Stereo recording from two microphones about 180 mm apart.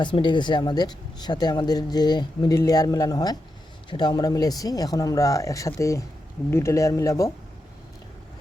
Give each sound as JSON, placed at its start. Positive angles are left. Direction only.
{"t": 0.0, "sound": "speech", "side_deg": 25}